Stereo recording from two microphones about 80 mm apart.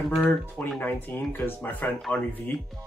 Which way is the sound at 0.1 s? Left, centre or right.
Centre.